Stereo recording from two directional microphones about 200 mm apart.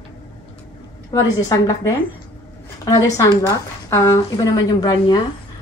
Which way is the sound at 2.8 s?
15° left (ahead or behind).